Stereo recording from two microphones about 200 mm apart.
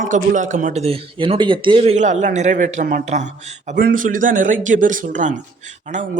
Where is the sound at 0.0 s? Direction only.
40° right (ahead or behind).